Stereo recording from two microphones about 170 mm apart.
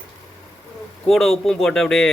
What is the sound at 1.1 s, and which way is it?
A man's voice, centre (ahead or behind).